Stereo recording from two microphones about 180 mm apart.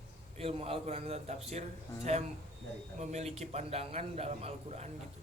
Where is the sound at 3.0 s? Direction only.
40° right (ahead or behind).